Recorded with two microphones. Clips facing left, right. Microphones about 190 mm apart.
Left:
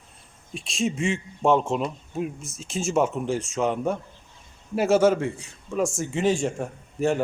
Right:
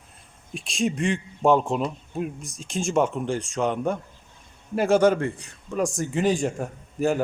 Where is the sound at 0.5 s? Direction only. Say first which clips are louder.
Right 1 dB; centre (ahead or behind).